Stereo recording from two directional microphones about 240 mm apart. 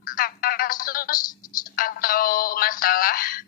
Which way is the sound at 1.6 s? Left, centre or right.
Left.